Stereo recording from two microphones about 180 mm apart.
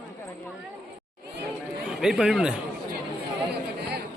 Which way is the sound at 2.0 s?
5° right (ahead or behind).